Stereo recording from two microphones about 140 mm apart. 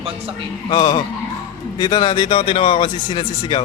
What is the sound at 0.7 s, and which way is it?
Speech, 35° left (ahead or behind).